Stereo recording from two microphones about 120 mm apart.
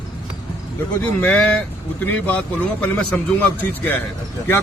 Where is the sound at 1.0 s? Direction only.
15° left (ahead or behind).